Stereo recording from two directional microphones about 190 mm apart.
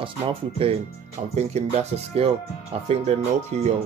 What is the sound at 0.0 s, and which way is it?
Speech, 30° right (ahead or behind).